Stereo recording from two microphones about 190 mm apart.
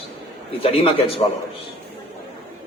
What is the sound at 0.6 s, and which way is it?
Speech, 30° left (ahead or behind).